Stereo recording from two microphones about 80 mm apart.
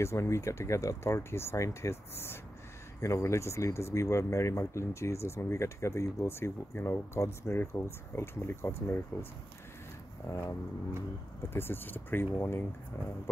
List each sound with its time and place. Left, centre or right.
0.0 s speech: left
10.3 s speech: left
11.5 s speech: left